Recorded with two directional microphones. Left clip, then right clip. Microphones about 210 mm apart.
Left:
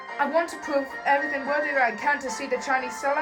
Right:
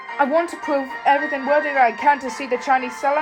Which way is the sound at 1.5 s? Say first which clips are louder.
Right 7 dB; centre (ahead or behind).